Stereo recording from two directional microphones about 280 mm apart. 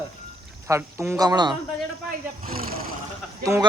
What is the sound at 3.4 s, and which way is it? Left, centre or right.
Speech, centre.